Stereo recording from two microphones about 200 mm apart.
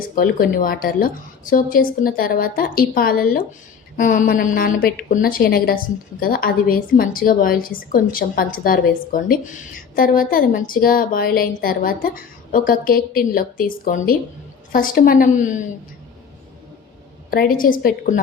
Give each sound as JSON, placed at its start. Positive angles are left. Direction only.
{"t": 0.2, "sound": "a woman's voice", "side_deg": 45}
{"t": 17.3, "sound": "a woman's voice", "side_deg": 45}